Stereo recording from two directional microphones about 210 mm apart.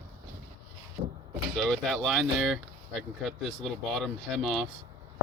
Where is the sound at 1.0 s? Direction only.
30° right (ahead or behind).